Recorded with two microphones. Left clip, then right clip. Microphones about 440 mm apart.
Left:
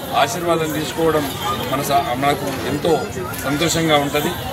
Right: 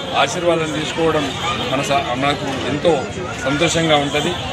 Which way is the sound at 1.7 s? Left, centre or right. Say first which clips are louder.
Left 1 dB; left.